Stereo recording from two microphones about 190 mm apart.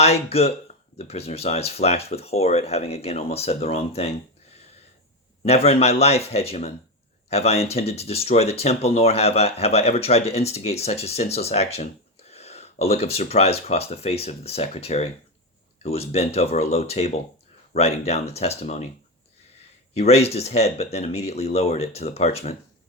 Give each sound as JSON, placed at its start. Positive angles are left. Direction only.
{"t": 0.0, "sound": "speech", "side_deg": 35}
{"t": 5.4, "sound": "speech", "side_deg": 30}
{"t": 20.0, "sound": "speech", "side_deg": 35}